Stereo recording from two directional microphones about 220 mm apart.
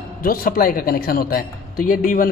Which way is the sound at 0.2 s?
40° left (ahead or behind).